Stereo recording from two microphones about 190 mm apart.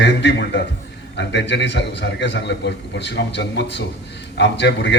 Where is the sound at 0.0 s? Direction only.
65° left (ahead or behind).